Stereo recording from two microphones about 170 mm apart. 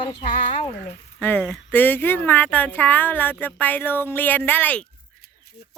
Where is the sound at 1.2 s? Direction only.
10° left (ahead or behind).